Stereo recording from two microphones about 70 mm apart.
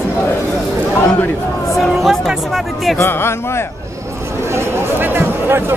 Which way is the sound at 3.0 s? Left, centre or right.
Left.